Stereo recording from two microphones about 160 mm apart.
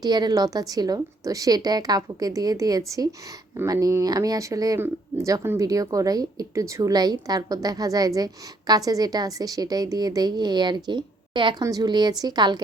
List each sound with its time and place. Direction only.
0.0 s speech: 25° right (ahead or behind)